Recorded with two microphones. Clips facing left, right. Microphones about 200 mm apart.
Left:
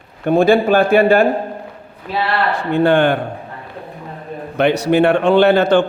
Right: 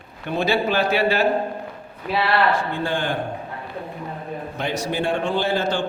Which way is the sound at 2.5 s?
65° left (ahead or behind).